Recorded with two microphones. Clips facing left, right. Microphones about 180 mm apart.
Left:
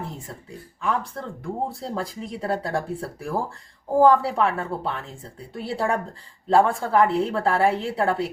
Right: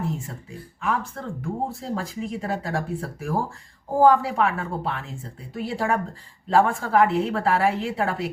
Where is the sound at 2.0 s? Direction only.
35° left (ahead or behind).